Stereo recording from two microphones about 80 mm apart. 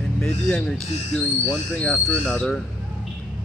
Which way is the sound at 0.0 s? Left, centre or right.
Centre.